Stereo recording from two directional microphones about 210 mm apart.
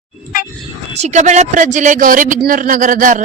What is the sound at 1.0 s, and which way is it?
Speech, 35° right (ahead or behind).